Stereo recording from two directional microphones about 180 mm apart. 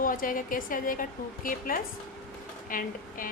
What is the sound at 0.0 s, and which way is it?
A woman's voice, 50° left (ahead or behind).